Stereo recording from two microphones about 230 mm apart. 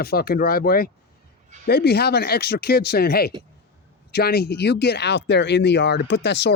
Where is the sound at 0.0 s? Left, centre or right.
Left.